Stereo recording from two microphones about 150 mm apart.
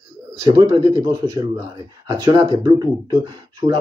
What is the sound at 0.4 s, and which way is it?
Speech, 25° right (ahead or behind).